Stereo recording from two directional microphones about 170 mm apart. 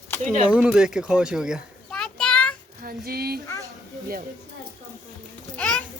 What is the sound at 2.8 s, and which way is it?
Dishes, 60° right (ahead or behind).